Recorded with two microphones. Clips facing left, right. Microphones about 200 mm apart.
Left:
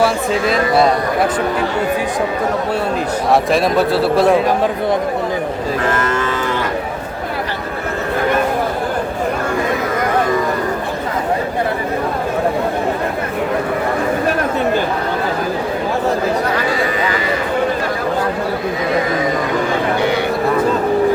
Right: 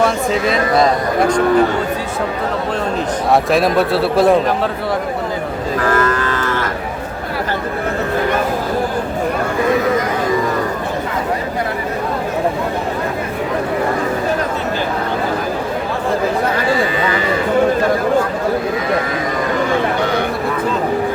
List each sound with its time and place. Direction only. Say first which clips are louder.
0.0 s speech: even; centre (ahead or behind)
3.3 s speech: right 1 dB; centre (ahead or behind)
5.8 s livestock: right 3 dB; 25° left (ahead or behind)